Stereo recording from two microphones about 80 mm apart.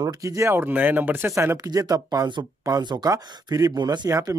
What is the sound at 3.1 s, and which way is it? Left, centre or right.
Speech, right.